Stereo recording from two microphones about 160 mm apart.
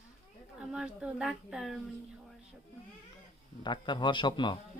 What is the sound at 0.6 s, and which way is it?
Speech, 5° right (ahead or behind).